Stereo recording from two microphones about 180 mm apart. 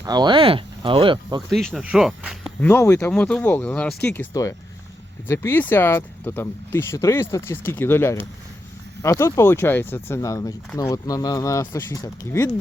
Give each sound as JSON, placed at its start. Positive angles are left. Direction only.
{"t": 0.0, "sound": "speech", "side_deg": -25}
{"t": 1.7, "sound": "speech", "side_deg": -5}